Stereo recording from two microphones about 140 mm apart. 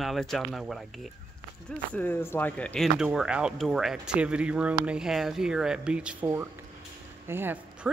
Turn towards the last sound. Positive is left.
turn(degrees=-15)  # may be behind; listen again after turning